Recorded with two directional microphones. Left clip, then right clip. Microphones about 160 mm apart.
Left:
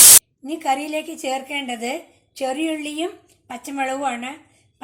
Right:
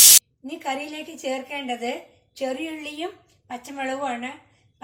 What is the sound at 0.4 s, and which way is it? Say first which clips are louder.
A woman's voice: left 7 dB; 45° left (ahead or behind).